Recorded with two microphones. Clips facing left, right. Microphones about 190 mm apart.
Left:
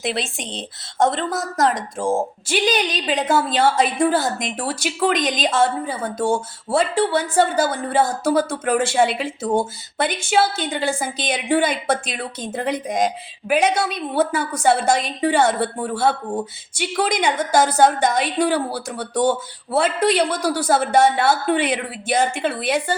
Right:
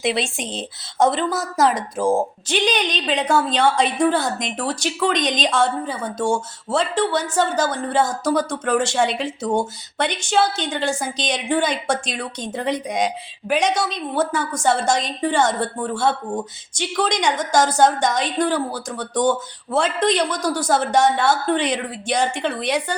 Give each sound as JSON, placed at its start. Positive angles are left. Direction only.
{"t": 0.0, "sound": "a woman's voice", "side_deg": 0}